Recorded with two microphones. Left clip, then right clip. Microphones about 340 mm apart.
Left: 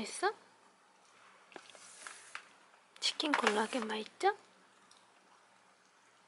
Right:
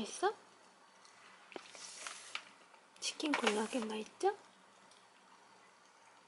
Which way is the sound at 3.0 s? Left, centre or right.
Centre.